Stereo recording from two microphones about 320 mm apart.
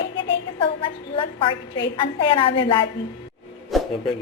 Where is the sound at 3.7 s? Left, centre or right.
Centre.